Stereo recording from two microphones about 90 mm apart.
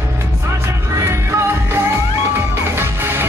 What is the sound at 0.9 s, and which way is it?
Music, 30° right (ahead or behind).